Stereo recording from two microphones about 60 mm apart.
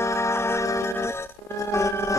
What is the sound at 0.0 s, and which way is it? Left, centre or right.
Music, left.